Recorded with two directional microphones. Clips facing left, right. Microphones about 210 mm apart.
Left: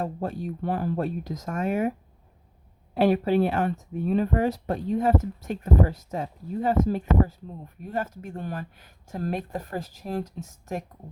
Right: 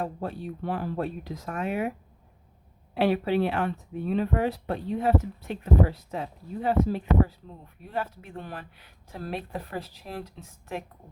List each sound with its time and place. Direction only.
0.0 s speech: 45° left (ahead or behind)
2.9 s speech: 45° left (ahead or behind)